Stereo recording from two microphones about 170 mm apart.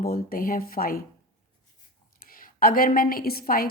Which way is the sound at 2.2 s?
55° left (ahead or behind).